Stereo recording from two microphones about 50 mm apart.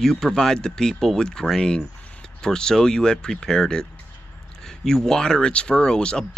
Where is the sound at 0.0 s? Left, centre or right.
Centre.